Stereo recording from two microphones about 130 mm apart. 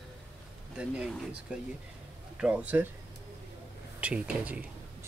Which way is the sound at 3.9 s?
10° right (ahead or behind).